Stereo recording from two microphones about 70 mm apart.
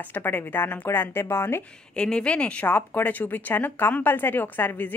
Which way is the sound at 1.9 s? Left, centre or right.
Centre.